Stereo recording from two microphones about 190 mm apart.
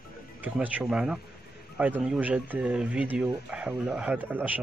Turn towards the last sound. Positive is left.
turn(degrees=-10)  # may be behind; listen again after turning